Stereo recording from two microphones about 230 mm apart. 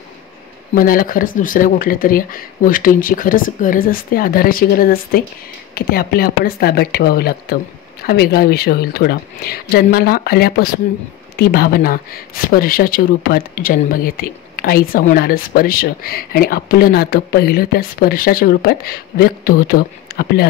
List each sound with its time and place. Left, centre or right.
0.7 s speech: left